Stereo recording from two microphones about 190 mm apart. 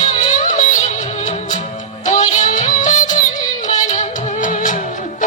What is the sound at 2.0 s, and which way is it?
Music, 40° left (ahead or behind).